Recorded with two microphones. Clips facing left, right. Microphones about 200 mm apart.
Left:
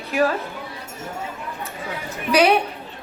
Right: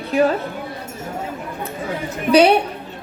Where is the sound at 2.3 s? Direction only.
25° right (ahead or behind).